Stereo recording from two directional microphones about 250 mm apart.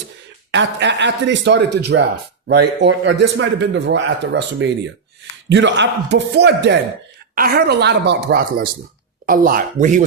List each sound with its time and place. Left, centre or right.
0.5 s speech: right